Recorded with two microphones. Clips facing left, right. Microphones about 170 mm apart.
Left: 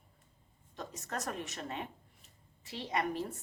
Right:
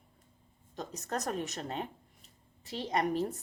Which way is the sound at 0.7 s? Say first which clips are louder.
Right 4 dB; 40° right (ahead or behind).